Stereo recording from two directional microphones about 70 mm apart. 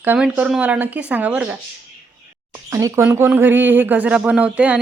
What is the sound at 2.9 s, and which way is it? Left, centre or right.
A woman's voice, right.